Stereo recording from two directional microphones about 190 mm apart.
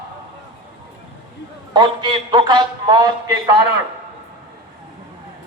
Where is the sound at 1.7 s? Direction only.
20° right (ahead or behind).